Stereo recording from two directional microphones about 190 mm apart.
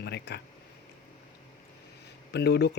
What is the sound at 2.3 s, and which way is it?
Speech, 60° left (ahead or behind).